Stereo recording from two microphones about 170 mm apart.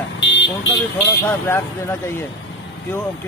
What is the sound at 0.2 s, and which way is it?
Car alarm, 90° left.